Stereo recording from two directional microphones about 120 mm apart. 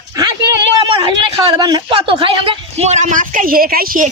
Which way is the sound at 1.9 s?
45° right (ahead or behind).